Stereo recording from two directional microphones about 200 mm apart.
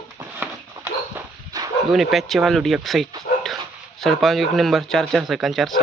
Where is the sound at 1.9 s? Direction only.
Centre (ahead or behind).